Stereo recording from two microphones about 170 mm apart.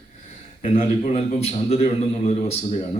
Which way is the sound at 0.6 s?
45° left (ahead or behind).